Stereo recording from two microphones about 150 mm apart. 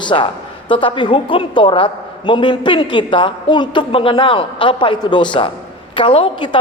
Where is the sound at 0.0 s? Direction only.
35° left (ahead or behind).